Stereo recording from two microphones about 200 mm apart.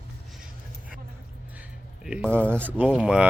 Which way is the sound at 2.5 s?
10° right (ahead or behind).